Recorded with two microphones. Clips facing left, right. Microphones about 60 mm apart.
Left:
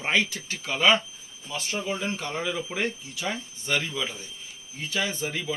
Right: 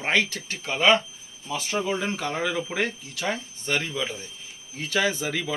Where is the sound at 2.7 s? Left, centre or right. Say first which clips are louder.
Right 2 dB; right.